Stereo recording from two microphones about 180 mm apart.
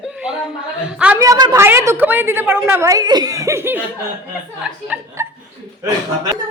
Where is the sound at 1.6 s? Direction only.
15° right (ahead or behind).